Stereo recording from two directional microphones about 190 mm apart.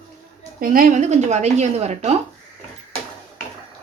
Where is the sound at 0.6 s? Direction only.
50° right (ahead or behind).